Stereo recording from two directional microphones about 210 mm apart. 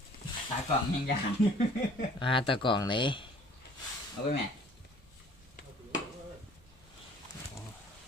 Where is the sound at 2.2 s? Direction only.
25° left (ahead or behind).